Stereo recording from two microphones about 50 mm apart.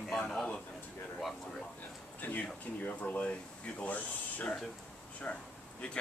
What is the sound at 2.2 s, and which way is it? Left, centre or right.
Speech, left.